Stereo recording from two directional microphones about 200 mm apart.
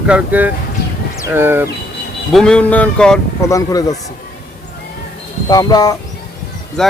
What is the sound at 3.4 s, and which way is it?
Speech, 15° left (ahead or behind).